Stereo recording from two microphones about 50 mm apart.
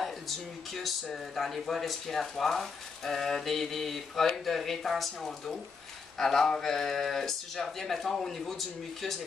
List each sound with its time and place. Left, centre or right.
1.1 s speech: centre